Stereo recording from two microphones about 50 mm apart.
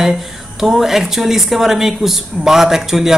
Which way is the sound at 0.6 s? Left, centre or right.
Centre.